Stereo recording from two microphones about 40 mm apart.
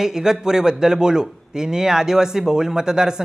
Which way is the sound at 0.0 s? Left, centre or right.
Centre.